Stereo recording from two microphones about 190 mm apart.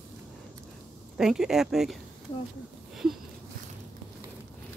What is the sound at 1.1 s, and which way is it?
Speech, 5° right (ahead or behind).